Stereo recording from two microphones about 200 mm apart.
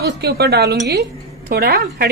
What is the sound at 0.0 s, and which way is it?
A woman's voice, 55° right (ahead or behind).